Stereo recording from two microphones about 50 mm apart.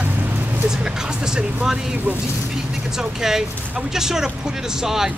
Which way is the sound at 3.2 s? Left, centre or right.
Centre.